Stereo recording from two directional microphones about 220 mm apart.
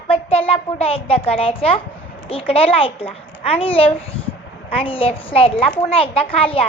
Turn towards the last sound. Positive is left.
turn(degrees=25)  # may be behind; listen again after turning